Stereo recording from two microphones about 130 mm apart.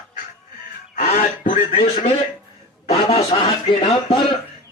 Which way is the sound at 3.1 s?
50° left (ahead or behind).